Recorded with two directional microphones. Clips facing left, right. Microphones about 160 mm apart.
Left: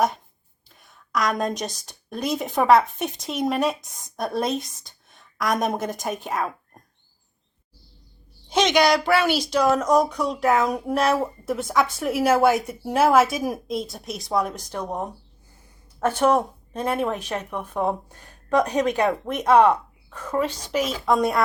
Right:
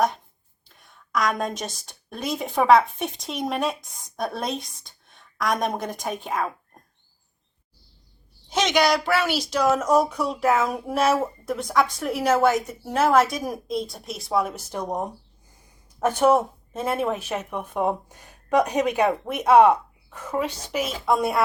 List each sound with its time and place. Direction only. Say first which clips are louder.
0.8 s a woman's voice: even; centre (ahead or behind)
8.4 s speech: left 2 dB; 5° right (ahead or behind)